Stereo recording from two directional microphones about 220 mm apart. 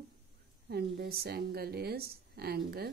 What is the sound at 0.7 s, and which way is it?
Speech, 45° right (ahead or behind).